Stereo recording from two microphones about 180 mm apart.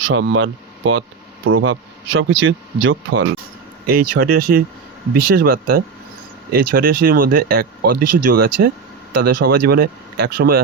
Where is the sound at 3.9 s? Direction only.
55° right (ahead or behind).